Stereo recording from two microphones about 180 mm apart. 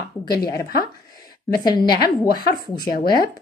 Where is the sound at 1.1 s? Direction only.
20° left (ahead or behind).